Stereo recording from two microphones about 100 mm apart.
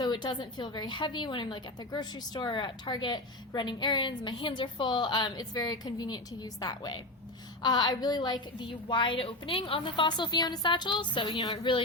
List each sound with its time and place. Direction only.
0.0 s a woman's voice: 45° left (ahead or behind); by 9.8 s 65° left (ahead or behind)
9.8 s a woman's voice: 50° left (ahead or behind)